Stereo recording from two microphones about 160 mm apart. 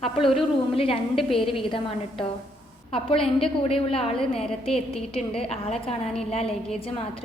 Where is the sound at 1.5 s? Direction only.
35° left (ahead or behind).